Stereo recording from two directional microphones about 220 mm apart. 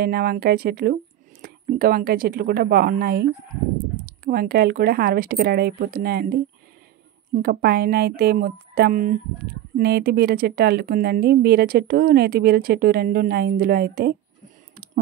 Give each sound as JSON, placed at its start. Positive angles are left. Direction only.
{"t": 0.0, "sound": "a woman's voice", "side_deg": -45}
{"t": 1.4, "sound": "a sound", "side_deg": -45}
{"t": 1.8, "sound": "a woman's voice", "side_deg": -40}
{"t": 7.3, "sound": "a woman's voice", "side_deg": -45}